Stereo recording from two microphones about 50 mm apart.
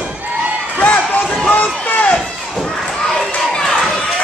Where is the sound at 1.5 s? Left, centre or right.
Left.